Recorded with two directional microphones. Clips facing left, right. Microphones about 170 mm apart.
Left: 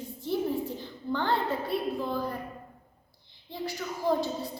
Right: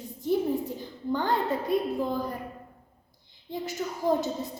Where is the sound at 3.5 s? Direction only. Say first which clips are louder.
Right 2 dB; 20° right (ahead or behind).